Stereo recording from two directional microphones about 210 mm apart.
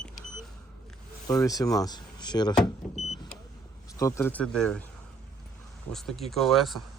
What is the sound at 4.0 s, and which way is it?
Speech, 15° left (ahead or behind).